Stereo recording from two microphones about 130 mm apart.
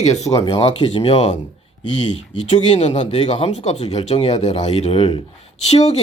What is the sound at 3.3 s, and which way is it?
Speech, 55° left (ahead or behind).